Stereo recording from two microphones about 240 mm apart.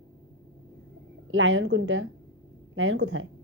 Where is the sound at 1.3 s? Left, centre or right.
Right.